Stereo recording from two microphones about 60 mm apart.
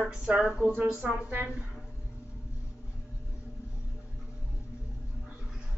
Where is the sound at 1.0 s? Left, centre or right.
Right.